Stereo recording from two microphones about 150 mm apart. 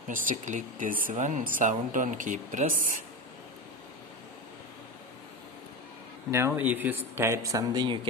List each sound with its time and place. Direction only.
0.1 s speech: 60° right (ahead or behind)
6.3 s speech: 15° right (ahead or behind); by 8.1 s 30° right (ahead or behind)